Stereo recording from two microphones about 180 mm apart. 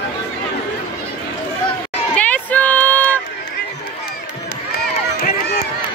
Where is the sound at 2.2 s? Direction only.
10° left (ahead or behind).